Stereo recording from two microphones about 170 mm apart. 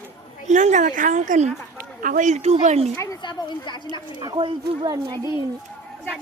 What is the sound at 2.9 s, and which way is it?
Speech, 25° left (ahead or behind).